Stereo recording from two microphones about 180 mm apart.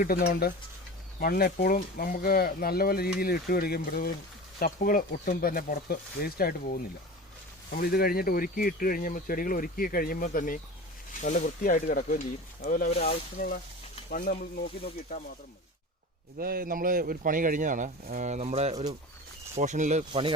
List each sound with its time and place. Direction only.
0.0 s speech: 60° left (ahead or behind)
12.9 s speech: 35° left (ahead or behind)
14.1 s speech: 50° left (ahead or behind)
16.4 s speech: 55° right (ahead or behind)